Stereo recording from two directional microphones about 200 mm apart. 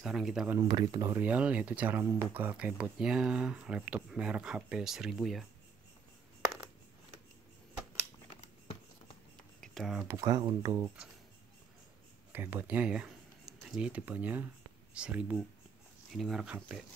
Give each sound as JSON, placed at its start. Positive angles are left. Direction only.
{"t": 0.0, "sound": "speech", "side_deg": 0}
{"t": 0.6, "sound": "speech", "side_deg": -20}
{"t": 9.6, "sound": "computer keyboard", "side_deg": 0}
{"t": 10.0, "sound": "speech", "side_deg": -15}
{"t": 12.3, "sound": "speech", "side_deg": -10}